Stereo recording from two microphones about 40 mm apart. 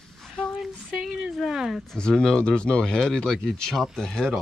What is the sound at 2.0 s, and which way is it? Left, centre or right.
Speech, centre.